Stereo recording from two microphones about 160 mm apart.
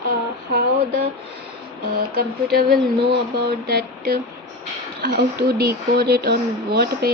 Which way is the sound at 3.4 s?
90° right.